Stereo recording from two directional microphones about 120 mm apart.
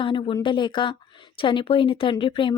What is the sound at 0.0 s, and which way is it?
Speech, 45° left (ahead or behind).